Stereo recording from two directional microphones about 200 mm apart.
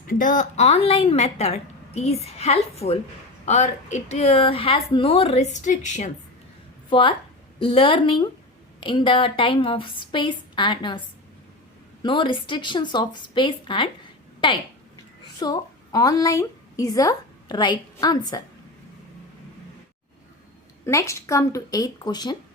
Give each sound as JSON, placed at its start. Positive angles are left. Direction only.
{"t": 0.1, "sound": "a woman's voice", "side_deg": 40}
{"t": 7.6, "sound": "a woman's voice", "side_deg": 25}
{"t": 12.0, "sound": "a woman's voice", "side_deg": 25}
{"t": 20.8, "sound": "speech", "side_deg": 15}